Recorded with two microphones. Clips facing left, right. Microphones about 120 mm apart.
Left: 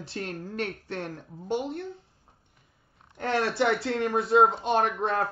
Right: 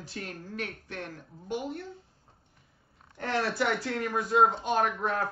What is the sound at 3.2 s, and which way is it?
Speech, 25° left (ahead or behind).